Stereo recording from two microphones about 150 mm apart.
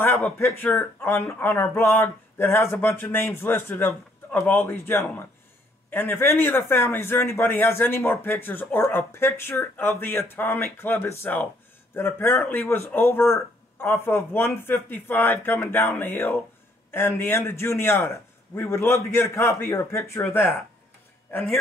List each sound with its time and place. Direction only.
0.0 s a man's voice: 15° left (ahead or behind)